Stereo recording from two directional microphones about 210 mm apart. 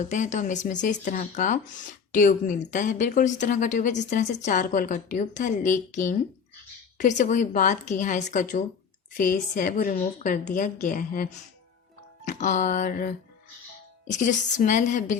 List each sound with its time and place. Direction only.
0.0 s a woman's voice: 35° left (ahead or behind)